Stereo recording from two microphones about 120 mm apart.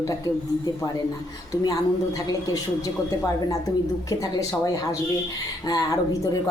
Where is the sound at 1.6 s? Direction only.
30° left (ahead or behind).